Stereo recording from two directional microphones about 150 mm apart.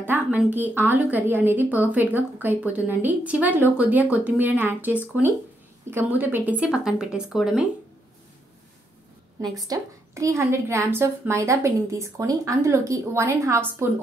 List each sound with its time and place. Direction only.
0.0 s speech: 15° right (ahead or behind)
9.4 s a woman's voice: 20° right (ahead or behind)